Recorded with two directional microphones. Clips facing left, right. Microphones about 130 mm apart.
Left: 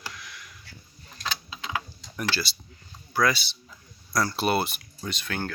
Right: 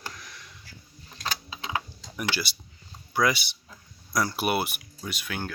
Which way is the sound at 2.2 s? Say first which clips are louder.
Left 1 dB; 15° right (ahead or behind).